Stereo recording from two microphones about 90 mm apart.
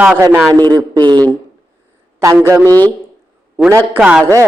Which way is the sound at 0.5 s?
45° right (ahead or behind).